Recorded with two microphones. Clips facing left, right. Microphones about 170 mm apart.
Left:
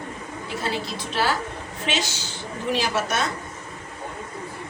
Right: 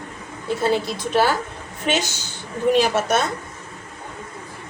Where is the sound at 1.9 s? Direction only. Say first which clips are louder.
Right 5 dB; 50° right (ahead or behind).